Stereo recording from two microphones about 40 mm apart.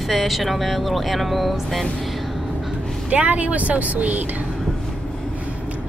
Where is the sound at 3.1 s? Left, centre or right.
Right.